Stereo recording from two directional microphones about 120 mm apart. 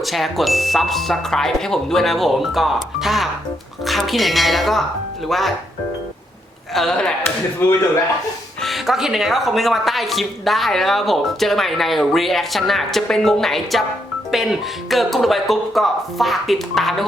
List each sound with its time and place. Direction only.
0.0 s speech: centre (ahead or behind)
6.7 s speech: 5° left (ahead or behind)
7.6 s speech: 20° left (ahead or behind)
8.6 s speech: centre (ahead or behind)